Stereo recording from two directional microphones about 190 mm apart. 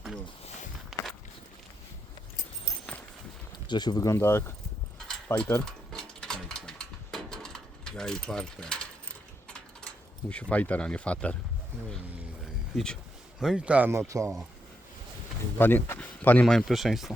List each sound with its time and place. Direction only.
0.9 s walk: centre (ahead or behind)
3.7 s speech: 20° left (ahead or behind)
5.0 s mechanisms: 5° left (ahead or behind)
10.2 s speech: 5° left (ahead or behind)
12.7 s speech: 5° left (ahead or behind)
15.5 s speech: 10° left (ahead or behind)